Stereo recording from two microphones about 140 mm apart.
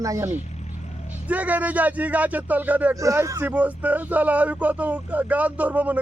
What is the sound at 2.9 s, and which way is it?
Speech, 20° right (ahead or behind).